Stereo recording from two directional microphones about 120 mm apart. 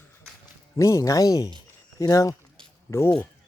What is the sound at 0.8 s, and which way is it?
Speech, 25° left (ahead or behind).